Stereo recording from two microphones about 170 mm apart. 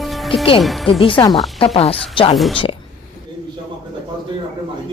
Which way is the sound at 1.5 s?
35° left (ahead or behind).